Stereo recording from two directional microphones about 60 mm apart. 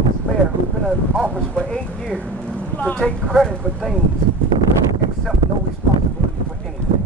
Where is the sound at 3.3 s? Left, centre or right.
Centre.